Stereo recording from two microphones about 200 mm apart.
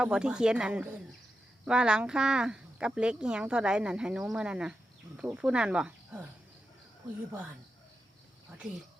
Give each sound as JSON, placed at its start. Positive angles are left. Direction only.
{"t": 0.0, "sound": "speech", "side_deg": -5}
{"t": 8.4, "sound": "speech", "side_deg": -5}